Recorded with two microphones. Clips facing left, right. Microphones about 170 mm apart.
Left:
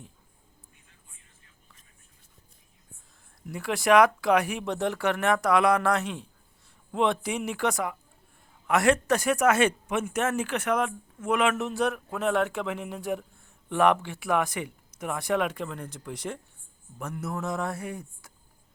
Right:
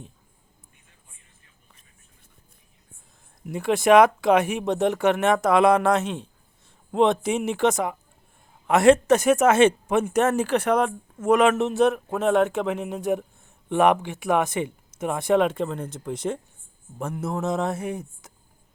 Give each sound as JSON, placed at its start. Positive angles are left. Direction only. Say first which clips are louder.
{"t": 3.4, "sound": "speech", "louder": "right 6 dB", "side_deg": -20}
{"t": 11.5, "sound": "speech", "louder": "right 7 dB", "side_deg": -25}